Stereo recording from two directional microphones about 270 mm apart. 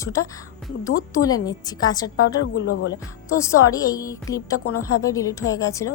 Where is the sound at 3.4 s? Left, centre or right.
Centre.